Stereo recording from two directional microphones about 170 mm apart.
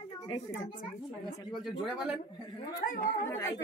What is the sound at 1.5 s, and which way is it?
Speech, centre (ahead or behind).